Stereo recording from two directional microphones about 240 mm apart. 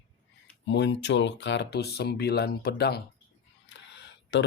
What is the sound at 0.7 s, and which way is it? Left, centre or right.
Speech, left.